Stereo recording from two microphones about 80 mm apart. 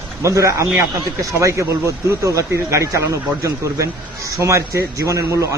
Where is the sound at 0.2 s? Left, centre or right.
Right.